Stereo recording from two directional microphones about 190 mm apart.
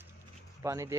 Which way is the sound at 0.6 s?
15° right (ahead or behind).